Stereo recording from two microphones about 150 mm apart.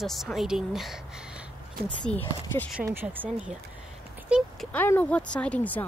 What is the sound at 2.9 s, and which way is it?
Speech, 15° right (ahead or behind).